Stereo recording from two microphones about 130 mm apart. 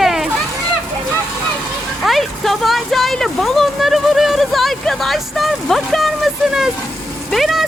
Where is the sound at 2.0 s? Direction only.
Centre (ahead or behind).